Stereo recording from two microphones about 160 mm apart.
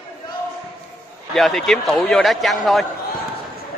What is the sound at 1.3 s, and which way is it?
A man's voice, centre (ahead or behind).